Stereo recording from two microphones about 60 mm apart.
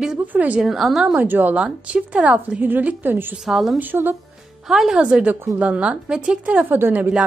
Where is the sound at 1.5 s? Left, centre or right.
Centre.